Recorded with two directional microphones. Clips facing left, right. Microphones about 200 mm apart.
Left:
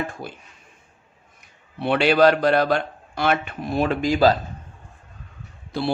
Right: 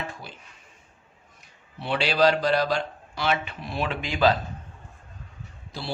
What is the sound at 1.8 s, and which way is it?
A man's voice, 55° left (ahead or behind).